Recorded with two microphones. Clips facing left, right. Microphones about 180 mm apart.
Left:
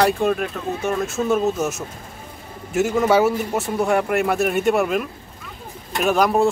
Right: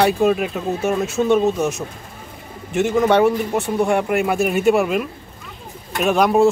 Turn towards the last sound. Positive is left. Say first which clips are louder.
# right 2 dB
turn(degrees=0)  # may be behind; listen again after turning